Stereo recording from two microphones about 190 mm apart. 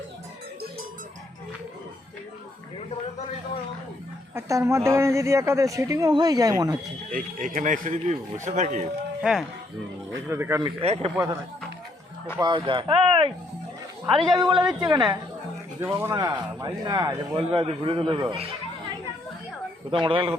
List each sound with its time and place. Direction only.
4.4 s speech: 15° right (ahead or behind)
7.1 s speech: 45° right (ahead or behind)
10.2 s speech: 15° right (ahead or behind)
10.8 s speech: 35° right (ahead or behind)
12.4 s speech: 25° right (ahead or behind)
14.3 s speech: 25° right (ahead or behind)
15.8 s speech: 10° right (ahead or behind)
19.9 s speech: 25° right (ahead or behind)